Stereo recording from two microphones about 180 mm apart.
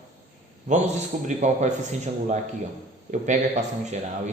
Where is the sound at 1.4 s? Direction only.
40° right (ahead or behind).